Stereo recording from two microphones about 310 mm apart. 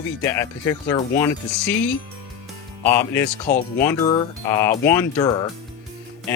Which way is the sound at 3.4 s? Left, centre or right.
Left.